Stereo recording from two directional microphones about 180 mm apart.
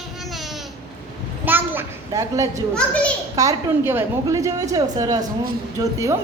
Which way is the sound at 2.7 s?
5° left (ahead or behind).